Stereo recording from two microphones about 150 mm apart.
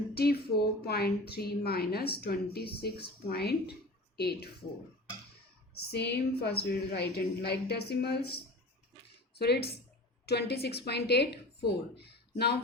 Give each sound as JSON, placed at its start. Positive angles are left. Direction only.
{"t": 0.1, "sound": "a woman's voice", "side_deg": 90}
{"t": 5.7, "sound": "a woman's voice", "side_deg": 90}
{"t": 9.4, "sound": "a woman's voice", "side_deg": 90}